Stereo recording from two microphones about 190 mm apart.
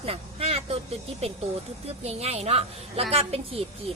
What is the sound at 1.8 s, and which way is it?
A woman's voice, 35° right (ahead or behind).